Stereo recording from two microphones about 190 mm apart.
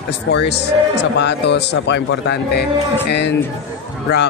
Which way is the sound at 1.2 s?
65° left (ahead or behind).